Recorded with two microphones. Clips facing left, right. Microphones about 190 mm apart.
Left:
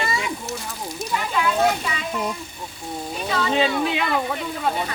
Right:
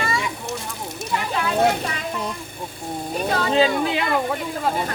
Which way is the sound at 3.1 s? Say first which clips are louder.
Right 2 dB; 50° right (ahead or behind).